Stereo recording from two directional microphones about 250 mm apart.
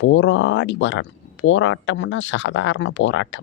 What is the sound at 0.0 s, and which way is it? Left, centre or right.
Speech, left.